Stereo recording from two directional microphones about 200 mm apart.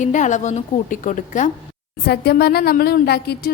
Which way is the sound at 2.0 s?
55° left (ahead or behind).